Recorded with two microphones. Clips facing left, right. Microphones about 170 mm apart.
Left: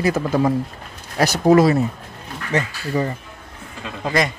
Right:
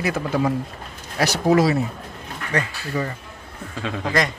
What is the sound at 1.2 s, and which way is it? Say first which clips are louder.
Speech: left 4 dB; 50° left (ahead or behind).